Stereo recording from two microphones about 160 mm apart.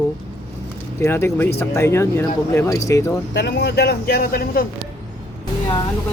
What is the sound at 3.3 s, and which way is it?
Speech, 90° left.